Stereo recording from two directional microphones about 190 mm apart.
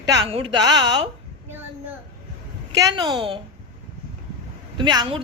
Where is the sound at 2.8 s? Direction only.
20° right (ahead or behind).